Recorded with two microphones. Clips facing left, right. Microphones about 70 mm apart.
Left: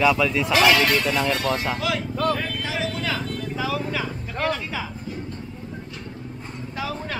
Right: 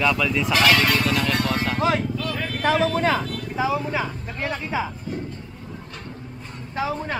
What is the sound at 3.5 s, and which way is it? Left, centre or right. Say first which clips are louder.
Speech: right 4 dB; right.